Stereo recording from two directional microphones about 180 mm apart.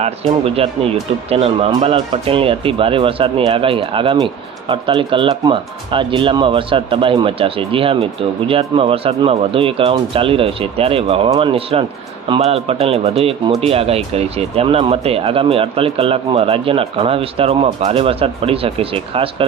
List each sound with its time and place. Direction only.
0.0 s speech: 35° right (ahead or behind)